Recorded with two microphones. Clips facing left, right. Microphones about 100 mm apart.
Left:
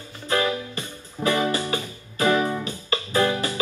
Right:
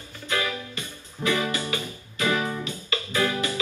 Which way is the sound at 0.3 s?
35° left (ahead or behind).